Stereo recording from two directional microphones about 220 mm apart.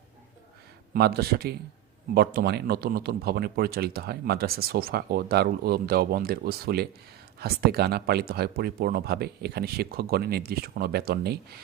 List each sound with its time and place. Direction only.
0.9 s speech: 45° right (ahead or behind)